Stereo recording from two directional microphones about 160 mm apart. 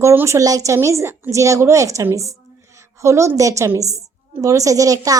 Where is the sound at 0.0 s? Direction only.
15° right (ahead or behind).